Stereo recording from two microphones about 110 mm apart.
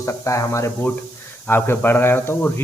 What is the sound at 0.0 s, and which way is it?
Speech, 30° left (ahead or behind).